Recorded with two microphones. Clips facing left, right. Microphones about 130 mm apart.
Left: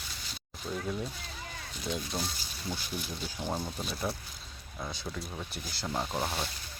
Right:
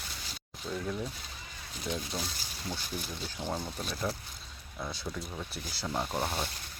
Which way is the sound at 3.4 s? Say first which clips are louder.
Left 1 dB; 5° left (ahead or behind).